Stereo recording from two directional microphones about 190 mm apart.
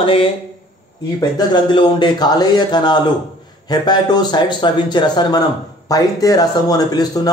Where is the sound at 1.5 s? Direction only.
25° left (ahead or behind).